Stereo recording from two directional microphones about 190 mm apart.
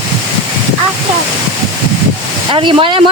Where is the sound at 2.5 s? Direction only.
25° right (ahead or behind).